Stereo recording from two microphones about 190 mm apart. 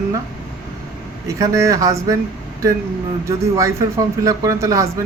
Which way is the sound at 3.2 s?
15° right (ahead or behind).